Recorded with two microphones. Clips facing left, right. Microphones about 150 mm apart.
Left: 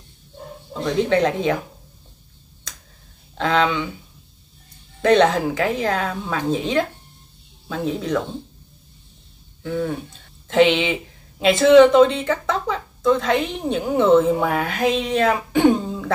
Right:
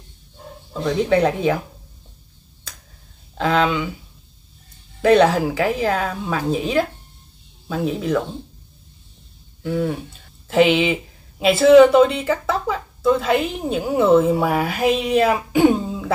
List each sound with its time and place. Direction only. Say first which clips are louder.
0.8 s speech: right 1 dB; 10° right (ahead or behind)
3.3 s speech: right 1 dB; 5° right (ahead or behind)
5.0 s speech: right 1 dB; 10° right (ahead or behind)
9.6 s speech: right 2 dB; 10° right (ahead or behind)